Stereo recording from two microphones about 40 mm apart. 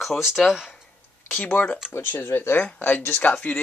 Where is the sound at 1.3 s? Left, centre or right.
Left.